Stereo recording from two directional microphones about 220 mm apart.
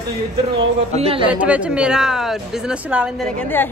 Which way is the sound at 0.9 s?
25° right (ahead or behind).